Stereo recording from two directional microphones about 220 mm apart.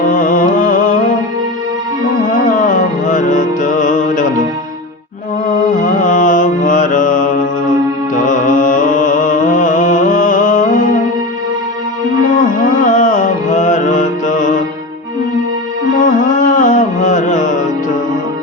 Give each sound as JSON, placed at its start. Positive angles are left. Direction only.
{"t": 0.1, "sound": "music", "side_deg": 40}
{"t": 2.5, "sound": "music", "side_deg": 35}
{"t": 5.5, "sound": "mantra", "side_deg": 35}
{"t": 8.1, "sound": "music", "side_deg": 35}
{"t": 12.3, "sound": "music", "side_deg": 35}
{"t": 16.0, "sound": "music", "side_deg": 35}